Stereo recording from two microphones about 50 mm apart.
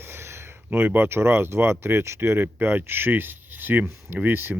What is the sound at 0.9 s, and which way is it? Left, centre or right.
Speech, right.